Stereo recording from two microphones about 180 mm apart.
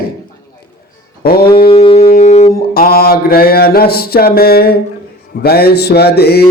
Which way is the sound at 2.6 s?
55° left (ahead or behind).